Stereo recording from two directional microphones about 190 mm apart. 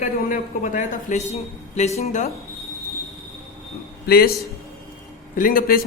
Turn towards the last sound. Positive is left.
turn(degrees=50)  # may be behind; listen again after turning